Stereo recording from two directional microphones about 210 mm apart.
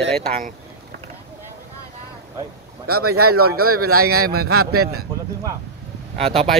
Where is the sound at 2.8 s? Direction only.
90° right.